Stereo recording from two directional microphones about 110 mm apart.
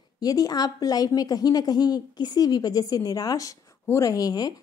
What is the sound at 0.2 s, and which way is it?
A woman's voice, 35° left (ahead or behind).